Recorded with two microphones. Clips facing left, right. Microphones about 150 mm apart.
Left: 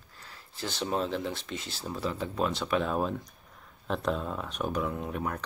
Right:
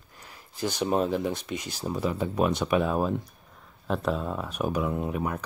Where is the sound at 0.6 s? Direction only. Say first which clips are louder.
Right 5 dB; 15° right (ahead or behind).